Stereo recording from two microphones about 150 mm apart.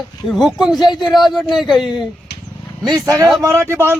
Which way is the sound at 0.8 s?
30° left (ahead or behind).